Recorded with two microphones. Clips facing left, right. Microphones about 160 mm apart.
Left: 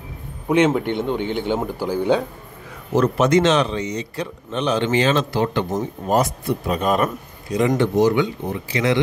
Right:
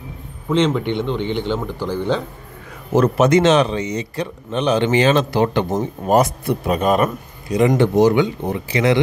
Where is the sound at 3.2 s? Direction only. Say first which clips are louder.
Right 3 dB; 5° right (ahead or behind).